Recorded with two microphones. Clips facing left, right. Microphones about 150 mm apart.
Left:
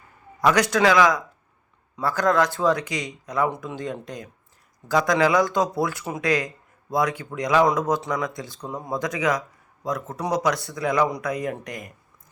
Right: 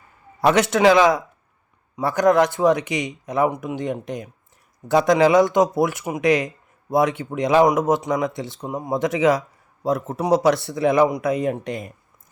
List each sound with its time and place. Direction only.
0.4 s speech: 25° right (ahead or behind)